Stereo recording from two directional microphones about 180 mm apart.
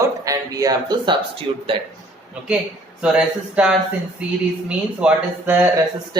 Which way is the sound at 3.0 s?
5° right (ahead or behind).